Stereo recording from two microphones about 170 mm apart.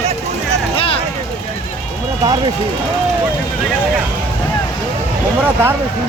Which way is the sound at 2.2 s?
25° right (ahead or behind).